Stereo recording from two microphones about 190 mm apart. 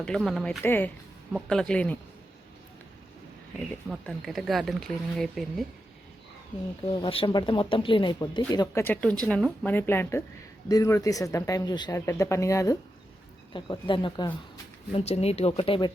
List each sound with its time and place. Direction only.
0.0 s speech: 5° left (ahead or behind)
3.8 s speech: centre (ahead or behind)
6.8 s speech: 25° left (ahead or behind)